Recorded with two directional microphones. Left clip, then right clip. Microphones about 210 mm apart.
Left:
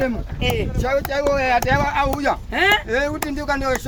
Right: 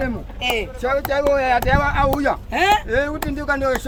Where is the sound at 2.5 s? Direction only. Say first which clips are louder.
Even; 50° right (ahead or behind).